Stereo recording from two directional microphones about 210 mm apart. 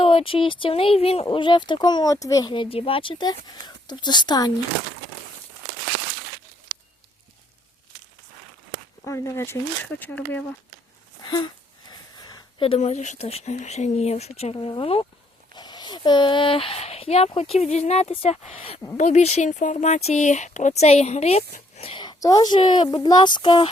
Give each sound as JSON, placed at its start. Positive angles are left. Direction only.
{"t": 0.0, "sound": "speech", "side_deg": 25}
{"t": 9.0, "sound": "speech", "side_deg": 15}
{"t": 11.3, "sound": "speech", "side_deg": 20}